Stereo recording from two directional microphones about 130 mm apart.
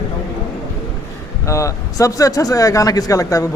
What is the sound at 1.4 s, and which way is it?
A man's voice, 25° left (ahead or behind).